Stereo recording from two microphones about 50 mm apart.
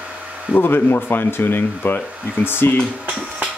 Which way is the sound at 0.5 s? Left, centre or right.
Left.